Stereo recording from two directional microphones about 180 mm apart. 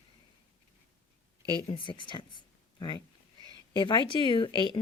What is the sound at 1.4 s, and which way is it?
Speech, 20° right (ahead or behind).